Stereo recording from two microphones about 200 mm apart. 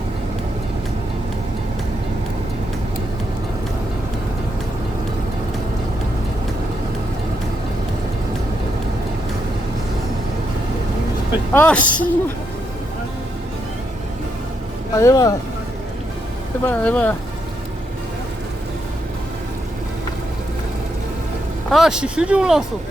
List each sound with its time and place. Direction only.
11.5 s speech: 5° left (ahead or behind)
14.9 s speech: 15° left (ahead or behind)
16.6 s speech: 5° left (ahead or behind)
21.7 s speech: centre (ahead or behind)